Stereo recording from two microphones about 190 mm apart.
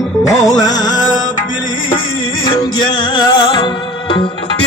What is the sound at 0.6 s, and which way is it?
Music, 40° left (ahead or behind).